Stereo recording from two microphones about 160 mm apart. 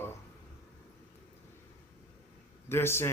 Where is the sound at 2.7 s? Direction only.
15° left (ahead or behind).